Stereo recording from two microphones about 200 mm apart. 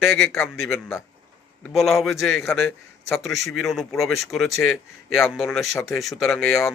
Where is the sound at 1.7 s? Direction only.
Centre (ahead or behind).